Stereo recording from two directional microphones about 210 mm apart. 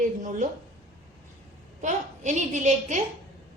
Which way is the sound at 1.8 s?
35° right (ahead or behind).